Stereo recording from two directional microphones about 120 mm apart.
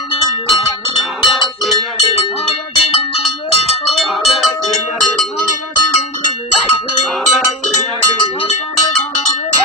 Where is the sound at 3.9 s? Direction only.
Centre (ahead or behind).